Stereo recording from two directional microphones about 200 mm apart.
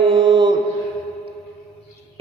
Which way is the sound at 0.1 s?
25° right (ahead or behind).